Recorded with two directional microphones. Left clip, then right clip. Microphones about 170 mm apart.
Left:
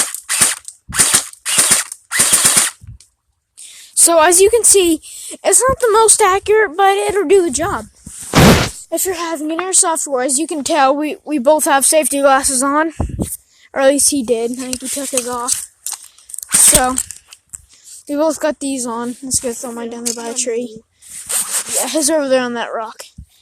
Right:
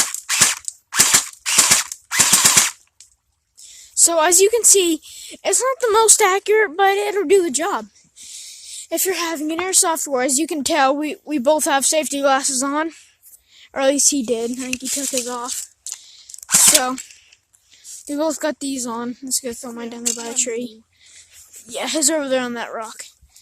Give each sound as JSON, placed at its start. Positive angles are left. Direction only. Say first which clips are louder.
{"t": 0.0, "sound": "cap gun", "louder": "even", "side_deg": -15}
{"t": 2.1, "sound": "machine gun", "louder": "even", "side_deg": -20}
{"t": 3.6, "sound": "a woman's voice", "louder": "left 2 dB", "side_deg": 10}
{"t": 7.6, "sound": "speech", "louder": "left 3 dB", "side_deg": -15}
{"t": 8.9, "sound": "a woman's voice", "louder": "left 2 dB", "side_deg": -10}
{"t": 17.8, "sound": "a woman's voice", "louder": "left 6 dB", "side_deg": 0}
{"t": 21.8, "sound": "a woman's voice", "louder": "left 4 dB", "side_deg": 0}